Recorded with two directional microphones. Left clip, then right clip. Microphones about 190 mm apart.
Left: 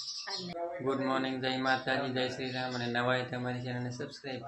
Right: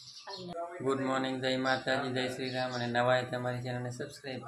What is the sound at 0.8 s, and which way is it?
Speech, 15° right (ahead or behind).